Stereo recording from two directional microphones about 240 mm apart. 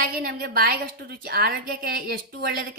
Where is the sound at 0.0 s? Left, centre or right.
Right.